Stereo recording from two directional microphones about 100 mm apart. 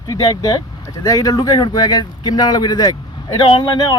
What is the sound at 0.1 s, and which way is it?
Speech, 45° left (ahead or behind).